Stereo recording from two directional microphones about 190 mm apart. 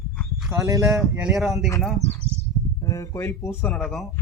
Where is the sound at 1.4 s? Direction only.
Centre (ahead or behind).